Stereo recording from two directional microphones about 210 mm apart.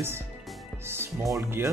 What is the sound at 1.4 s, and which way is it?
Speech, 10° right (ahead or behind).